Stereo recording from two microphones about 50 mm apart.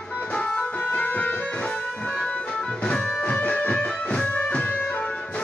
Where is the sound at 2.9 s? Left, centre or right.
Left.